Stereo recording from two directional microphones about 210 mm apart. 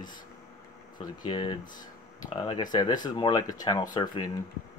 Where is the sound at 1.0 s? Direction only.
20° left (ahead or behind).